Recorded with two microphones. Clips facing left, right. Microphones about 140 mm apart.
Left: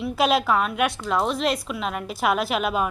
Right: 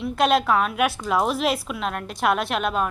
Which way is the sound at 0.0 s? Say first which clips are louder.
Right 1 dB; centre (ahead or behind).